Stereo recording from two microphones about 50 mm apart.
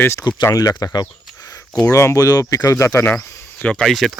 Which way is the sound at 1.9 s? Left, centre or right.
Left.